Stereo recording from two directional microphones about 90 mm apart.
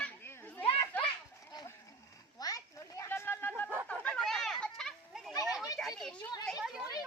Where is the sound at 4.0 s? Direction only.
10° left (ahead or behind).